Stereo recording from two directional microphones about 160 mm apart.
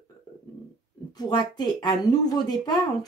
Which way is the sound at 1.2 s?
25° left (ahead or behind).